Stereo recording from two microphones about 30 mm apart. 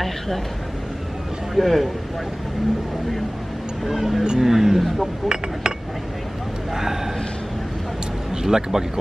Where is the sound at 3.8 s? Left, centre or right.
Centre.